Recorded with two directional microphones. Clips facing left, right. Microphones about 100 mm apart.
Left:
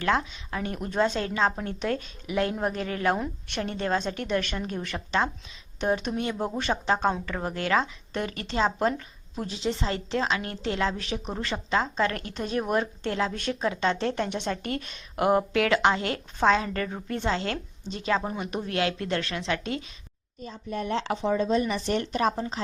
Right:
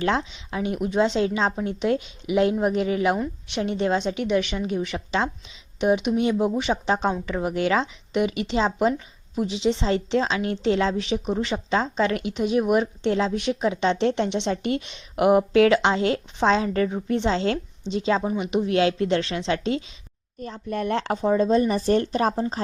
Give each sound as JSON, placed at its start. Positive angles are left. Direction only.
{"t": 0.0, "sound": "a woman's voice", "side_deg": -25}
{"t": 20.4, "sound": "speech", "side_deg": -55}